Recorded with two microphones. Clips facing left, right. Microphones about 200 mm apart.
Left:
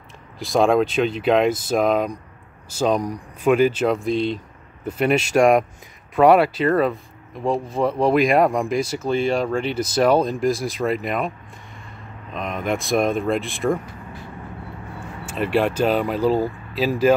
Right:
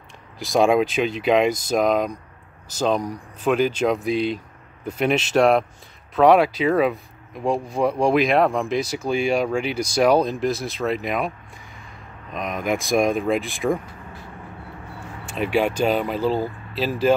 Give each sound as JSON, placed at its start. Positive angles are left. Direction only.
{"t": 0.4, "sound": "speech", "side_deg": 0}
{"t": 3.0, "sound": "speech", "side_deg": 15}
{"t": 3.5, "sound": "speech", "side_deg": 5}
{"t": 9.1, "sound": "speech", "side_deg": 0}
{"t": 10.5, "sound": "speech", "side_deg": 10}
{"t": 10.9, "sound": "speech", "side_deg": 0}
{"t": 12.4, "sound": "speech", "side_deg": 0}
{"t": 15.3, "sound": "speech", "side_deg": 0}